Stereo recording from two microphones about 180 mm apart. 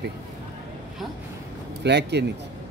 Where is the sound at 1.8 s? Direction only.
70° right (ahead or behind).